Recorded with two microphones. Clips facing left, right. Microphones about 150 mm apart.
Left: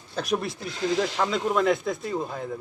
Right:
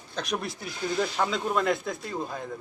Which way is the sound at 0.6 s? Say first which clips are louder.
Left 4 dB; 90° left.